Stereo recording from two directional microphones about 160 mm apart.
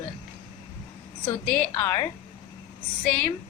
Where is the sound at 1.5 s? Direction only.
10° left (ahead or behind).